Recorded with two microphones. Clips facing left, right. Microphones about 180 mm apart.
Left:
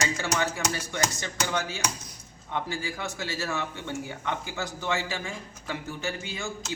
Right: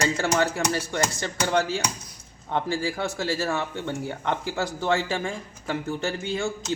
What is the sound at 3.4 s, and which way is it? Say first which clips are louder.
A man's voice: right 5 dB; 55° right (ahead or behind).